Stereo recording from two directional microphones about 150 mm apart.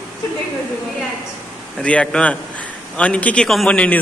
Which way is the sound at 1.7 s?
5° left (ahead or behind).